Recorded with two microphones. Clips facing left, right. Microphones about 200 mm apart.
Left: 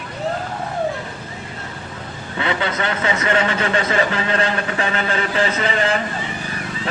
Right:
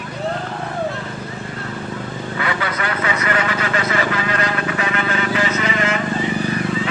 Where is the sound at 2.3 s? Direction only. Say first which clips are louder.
Left 3 dB; 25° left (ahead or behind).